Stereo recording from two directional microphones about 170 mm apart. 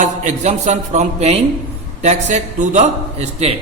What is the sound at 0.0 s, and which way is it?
A man's voice, 45° right (ahead or behind).